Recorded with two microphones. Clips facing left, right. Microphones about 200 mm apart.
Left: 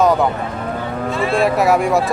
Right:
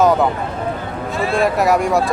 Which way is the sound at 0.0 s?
Centre (ahead or behind).